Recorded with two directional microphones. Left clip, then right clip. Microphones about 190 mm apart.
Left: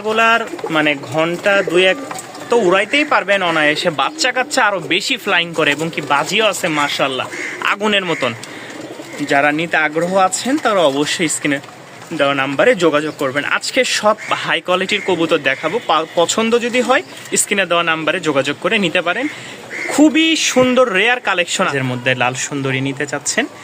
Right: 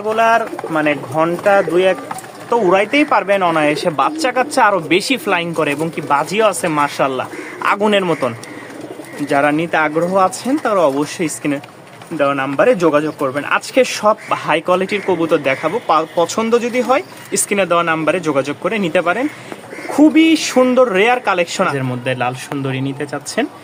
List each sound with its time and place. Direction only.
0.0 s speech: 5° left (ahead or behind)
6.1 s a man's voice: 15° right (ahead or behind)
9.3 s speech: 5° right (ahead or behind)